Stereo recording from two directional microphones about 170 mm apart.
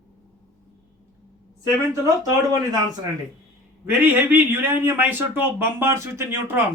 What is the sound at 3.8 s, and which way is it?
A man's voice, 10° right (ahead or behind).